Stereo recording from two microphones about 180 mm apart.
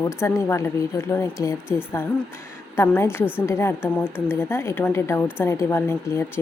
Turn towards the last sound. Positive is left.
turn(degrees=15)  # may be behind; listen again after turning